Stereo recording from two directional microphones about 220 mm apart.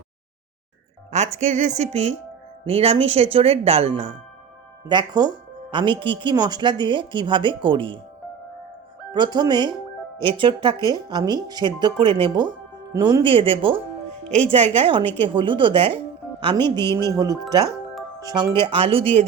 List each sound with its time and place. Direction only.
1.1 s speech: 30° right (ahead or behind)
9.1 s speech: 20° right (ahead or behind)
16.6 s a woman's voice: 10° left (ahead or behind)
18.2 s speech: 15° right (ahead or behind)